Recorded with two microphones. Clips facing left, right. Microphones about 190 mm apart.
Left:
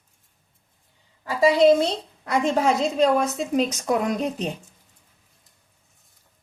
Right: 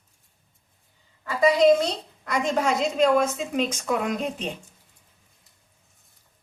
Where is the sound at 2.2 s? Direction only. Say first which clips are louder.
Left 3 dB; 35° left (ahead or behind).